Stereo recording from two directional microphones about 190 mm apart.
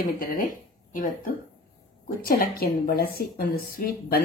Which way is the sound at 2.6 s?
50° left (ahead or behind).